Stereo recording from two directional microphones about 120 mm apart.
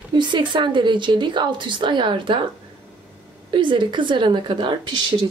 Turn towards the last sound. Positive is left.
turn(degrees=-40)  # may be behind; listen again after turning